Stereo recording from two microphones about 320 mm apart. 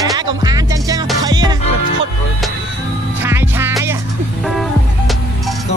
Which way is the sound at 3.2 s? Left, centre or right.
Centre.